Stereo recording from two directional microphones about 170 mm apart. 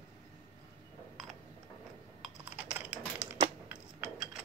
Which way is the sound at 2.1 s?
5° right (ahead or behind).